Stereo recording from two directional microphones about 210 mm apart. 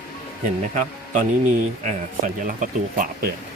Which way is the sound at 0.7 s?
35° right (ahead or behind).